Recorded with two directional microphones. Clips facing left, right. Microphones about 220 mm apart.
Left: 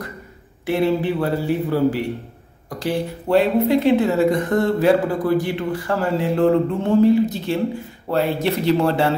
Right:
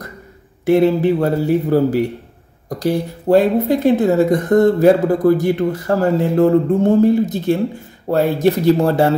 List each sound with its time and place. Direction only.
0.7 s speech: 45° right (ahead or behind)